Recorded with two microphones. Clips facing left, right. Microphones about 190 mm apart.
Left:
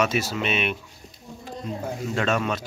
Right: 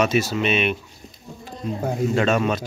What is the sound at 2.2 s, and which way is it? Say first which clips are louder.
Speech: right 2 dB; 5° right (ahead or behind).